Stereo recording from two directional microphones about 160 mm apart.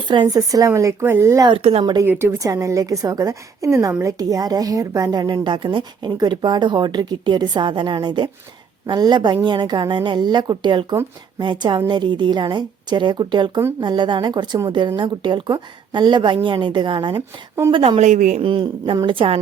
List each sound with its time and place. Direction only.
0.1 s a woman's voice: 25° right (ahead or behind)
1.5 s a woman's voice: 35° right (ahead or behind)
18.0 s speech: 50° right (ahead or behind)
18.4 s a woman's voice: 30° right (ahead or behind)